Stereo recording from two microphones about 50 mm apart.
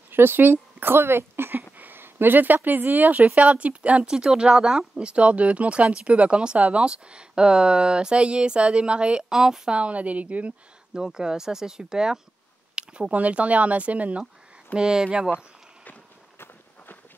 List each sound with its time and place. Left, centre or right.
0.1 s speech: right
4.1 s speech: centre
9.8 s speech: right
11.0 s speech: centre; by 14.2 s right
14.8 s speech: centre
15.3 s a sound: left
16.3 s walk: left